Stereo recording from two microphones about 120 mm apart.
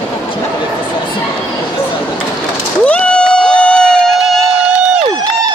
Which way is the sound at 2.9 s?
10° left (ahead or behind).